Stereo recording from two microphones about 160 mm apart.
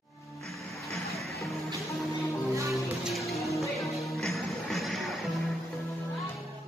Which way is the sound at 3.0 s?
Centre (ahead or behind).